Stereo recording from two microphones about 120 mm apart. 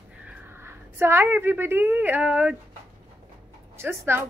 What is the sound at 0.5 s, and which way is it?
A woman's voice, 20° right (ahead or behind).